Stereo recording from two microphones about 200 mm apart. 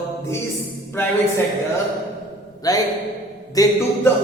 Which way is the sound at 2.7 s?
20° left (ahead or behind).